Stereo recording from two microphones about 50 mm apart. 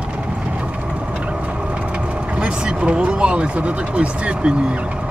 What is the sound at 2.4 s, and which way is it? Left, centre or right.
Speech, right.